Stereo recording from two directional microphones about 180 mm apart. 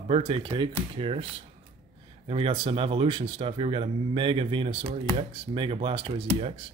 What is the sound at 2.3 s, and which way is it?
Speech, 30° right (ahead or behind).